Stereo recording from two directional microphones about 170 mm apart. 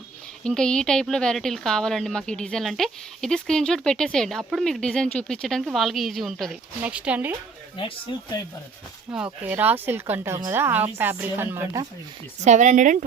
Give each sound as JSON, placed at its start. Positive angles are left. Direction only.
{"t": 0.4, "sound": "a woman's voice", "side_deg": 5}
{"t": 7.8, "sound": "speech", "side_deg": 30}
{"t": 9.1, "sound": "speech", "side_deg": -10}
{"t": 12.5, "sound": "speech", "side_deg": -45}